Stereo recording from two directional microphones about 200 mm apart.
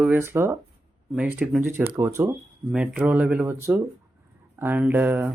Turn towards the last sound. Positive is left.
turn(degrees=-10)  # may be behind; listen again after turning